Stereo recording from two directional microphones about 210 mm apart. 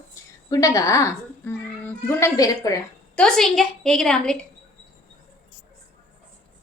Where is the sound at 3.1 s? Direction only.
5° left (ahead or behind).